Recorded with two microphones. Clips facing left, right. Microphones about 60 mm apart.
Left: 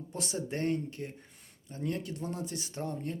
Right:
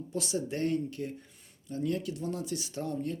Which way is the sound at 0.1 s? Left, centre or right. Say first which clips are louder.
Right 3 dB; left.